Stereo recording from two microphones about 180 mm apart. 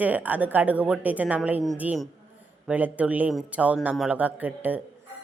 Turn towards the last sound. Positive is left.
turn(degrees=-10)  # may be behind; listen again after turning